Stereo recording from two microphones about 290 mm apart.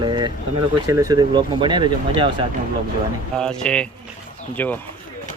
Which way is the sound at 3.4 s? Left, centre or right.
Centre.